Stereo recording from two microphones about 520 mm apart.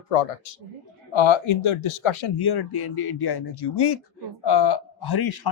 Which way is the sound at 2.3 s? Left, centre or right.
Left.